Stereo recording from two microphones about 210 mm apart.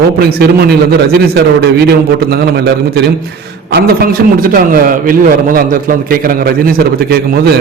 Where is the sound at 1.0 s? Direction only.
50° right (ahead or behind).